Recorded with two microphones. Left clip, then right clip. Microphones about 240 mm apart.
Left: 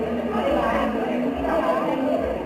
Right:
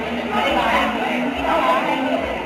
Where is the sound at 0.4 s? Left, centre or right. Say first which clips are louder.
Right 4 dB; centre.